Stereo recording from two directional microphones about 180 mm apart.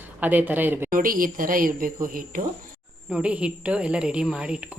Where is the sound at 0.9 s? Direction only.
50° right (ahead or behind).